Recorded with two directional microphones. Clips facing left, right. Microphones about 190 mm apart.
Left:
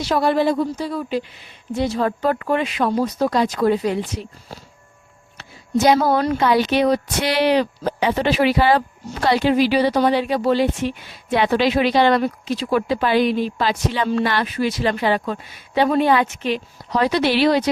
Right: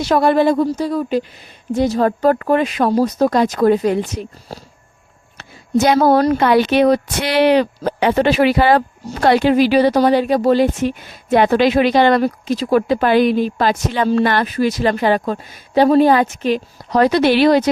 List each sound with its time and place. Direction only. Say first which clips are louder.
0.0 s speech: right 4 dB; 50° right (ahead or behind)
6.3 s speech: right 4 dB; 60° right (ahead or behind)